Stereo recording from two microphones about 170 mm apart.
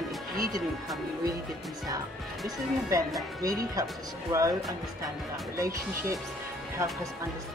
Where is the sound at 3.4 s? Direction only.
20° right (ahead or behind).